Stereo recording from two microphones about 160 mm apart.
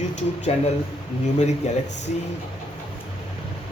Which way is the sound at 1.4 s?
45° left (ahead or behind).